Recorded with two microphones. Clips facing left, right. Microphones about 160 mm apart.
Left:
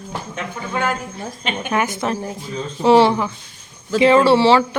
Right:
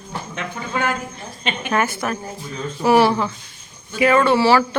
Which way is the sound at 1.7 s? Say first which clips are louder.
Left 1 dB; 15° left (ahead or behind).